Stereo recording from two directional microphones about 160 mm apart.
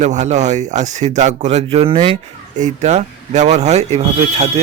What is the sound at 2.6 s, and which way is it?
Speech, 50° right (ahead or behind).